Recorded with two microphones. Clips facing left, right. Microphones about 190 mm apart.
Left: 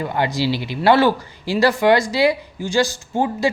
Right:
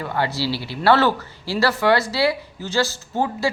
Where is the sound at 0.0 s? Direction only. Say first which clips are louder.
Left 3 dB; 15° left (ahead or behind).